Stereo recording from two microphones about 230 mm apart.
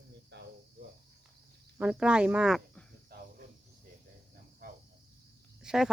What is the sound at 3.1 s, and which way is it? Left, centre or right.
Cricket, right.